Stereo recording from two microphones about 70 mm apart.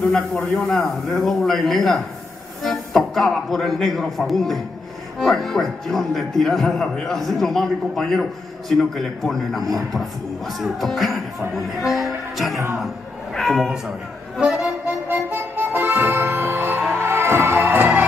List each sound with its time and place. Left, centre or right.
0.7 s a man's voice: centre
15.0 s music: right